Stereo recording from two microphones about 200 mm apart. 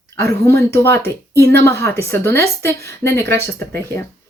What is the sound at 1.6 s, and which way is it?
Speech, 15° left (ahead or behind).